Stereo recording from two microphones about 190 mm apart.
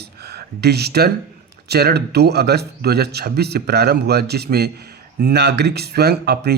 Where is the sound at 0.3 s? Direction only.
60° right (ahead or behind).